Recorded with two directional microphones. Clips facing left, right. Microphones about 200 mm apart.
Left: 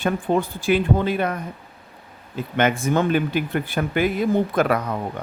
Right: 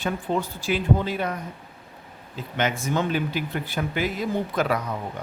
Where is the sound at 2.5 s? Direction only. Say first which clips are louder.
Left 5 dB; 55° left (ahead or behind).